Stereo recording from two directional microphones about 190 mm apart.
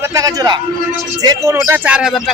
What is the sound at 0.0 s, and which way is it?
A man's voice, 15° right (ahead or behind).